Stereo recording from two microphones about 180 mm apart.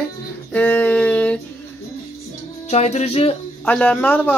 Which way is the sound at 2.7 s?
35° left (ahead or behind).